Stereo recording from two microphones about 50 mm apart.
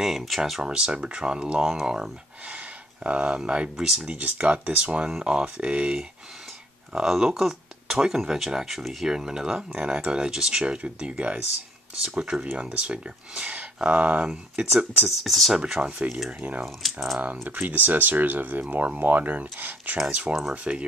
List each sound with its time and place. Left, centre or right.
0.0 s speech: centre
0.7 s speech: centre
2.4 s speech: right
3.7 s speech: centre
4.0 s speech: right
6.9 s speech: centre
13.8 s speech: right
15.0 s speech: centre
15.5 s speech: centre
16.3 s speech: right
16.8 s speech: centre
17.2 s speech: right